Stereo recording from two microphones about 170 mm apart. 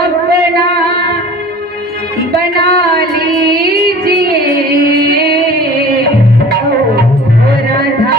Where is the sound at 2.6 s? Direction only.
70° right (ahead or behind).